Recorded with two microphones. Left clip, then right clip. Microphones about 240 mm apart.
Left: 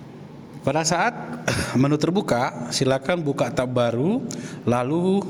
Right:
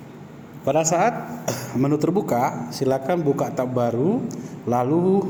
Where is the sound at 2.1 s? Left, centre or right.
Left.